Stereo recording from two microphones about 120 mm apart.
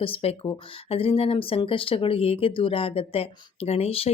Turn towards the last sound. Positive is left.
turn(degrees=55)  # may be behind; listen again after turning